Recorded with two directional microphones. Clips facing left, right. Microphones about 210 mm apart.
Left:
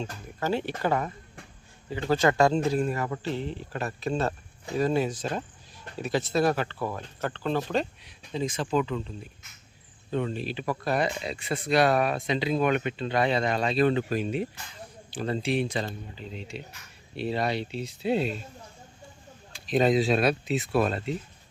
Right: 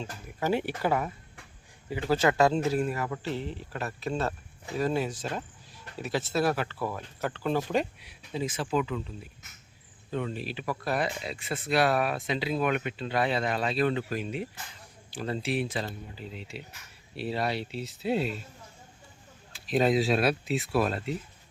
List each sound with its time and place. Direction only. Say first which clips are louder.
0.0 s speech: left 1 dB; 15° right (ahead or behind)
6.0 s speech: left 3 dB; 5° right (ahead or behind)
13.8 s speech: left 4 dB; 25° left (ahead or behind)
15.1 s speech: left 3 dB; 5° right (ahead or behind)
19.5 s speech: left 2 dB; 5° right (ahead or behind)